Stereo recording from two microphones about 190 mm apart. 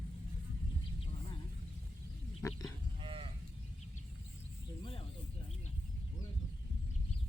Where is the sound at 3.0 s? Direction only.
25° right (ahead or behind).